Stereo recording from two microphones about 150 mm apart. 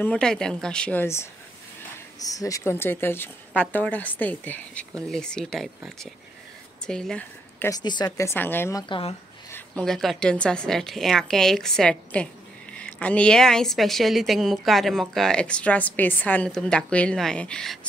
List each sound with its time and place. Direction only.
0.0 s a woman's voice: 5° left (ahead or behind)
7.8 s a woman's voice: 30° left (ahead or behind)
8.8 s speech: 35° left (ahead or behind)
9.5 s a woman's voice: 5° left (ahead or behind)